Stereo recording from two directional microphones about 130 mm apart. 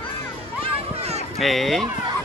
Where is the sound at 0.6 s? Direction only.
50° right (ahead or behind).